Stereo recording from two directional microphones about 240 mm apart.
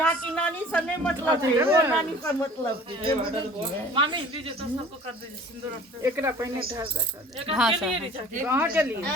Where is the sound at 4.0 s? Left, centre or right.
Right.